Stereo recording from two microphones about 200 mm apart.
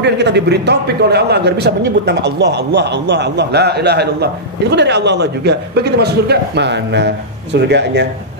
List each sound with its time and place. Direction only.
0.0 s a man's voice: 60° right (ahead or behind)